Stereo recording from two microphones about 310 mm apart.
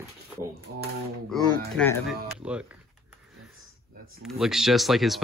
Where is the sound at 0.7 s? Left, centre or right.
Right.